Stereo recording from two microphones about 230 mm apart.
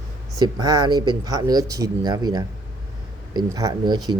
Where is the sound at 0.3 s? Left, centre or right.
Centre.